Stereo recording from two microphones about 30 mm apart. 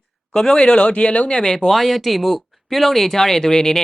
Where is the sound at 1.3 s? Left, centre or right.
Left.